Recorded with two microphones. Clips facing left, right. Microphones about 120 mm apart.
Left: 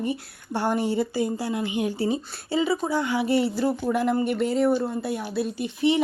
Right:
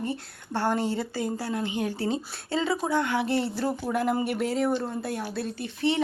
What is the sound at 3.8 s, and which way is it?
A woman's voice, centre (ahead or behind).